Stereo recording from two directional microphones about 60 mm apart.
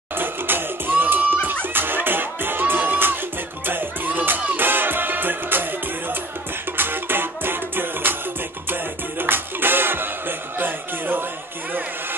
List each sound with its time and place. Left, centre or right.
0.2 s music: right
9.2 s music: right